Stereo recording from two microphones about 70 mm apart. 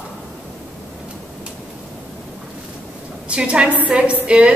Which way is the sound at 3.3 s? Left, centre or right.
Centre.